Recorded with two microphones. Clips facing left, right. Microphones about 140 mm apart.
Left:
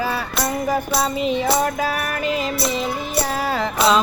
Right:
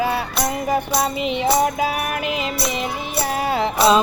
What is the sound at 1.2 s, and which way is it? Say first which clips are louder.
Music: left 1 dB; 15° right (ahead or behind).